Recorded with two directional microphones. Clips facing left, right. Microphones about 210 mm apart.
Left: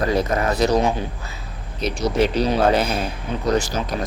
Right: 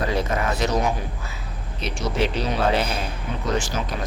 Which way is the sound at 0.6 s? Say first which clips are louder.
Left 6 dB; 30° left (ahead or behind).